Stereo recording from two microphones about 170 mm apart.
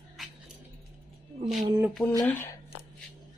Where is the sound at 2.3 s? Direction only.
15° left (ahead or behind).